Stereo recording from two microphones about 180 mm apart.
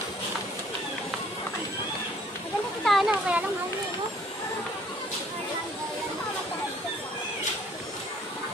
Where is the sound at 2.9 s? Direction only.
Centre (ahead or behind).